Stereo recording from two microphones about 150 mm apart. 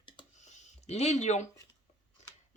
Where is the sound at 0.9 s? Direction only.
45° left (ahead or behind).